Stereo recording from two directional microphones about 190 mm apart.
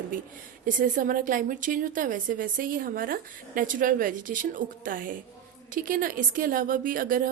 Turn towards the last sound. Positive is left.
turn(degrees=-45)  # may be behind; listen again after turning